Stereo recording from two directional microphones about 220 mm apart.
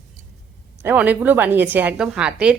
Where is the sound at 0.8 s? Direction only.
5° right (ahead or behind).